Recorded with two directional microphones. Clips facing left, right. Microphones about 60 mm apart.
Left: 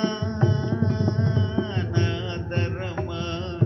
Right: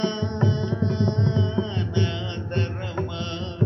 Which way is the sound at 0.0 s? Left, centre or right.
Centre.